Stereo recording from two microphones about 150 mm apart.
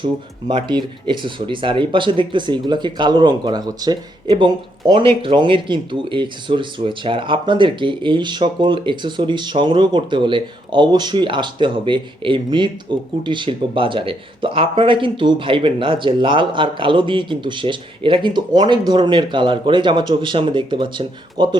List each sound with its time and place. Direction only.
0.0 s speech: 30° right (ahead or behind)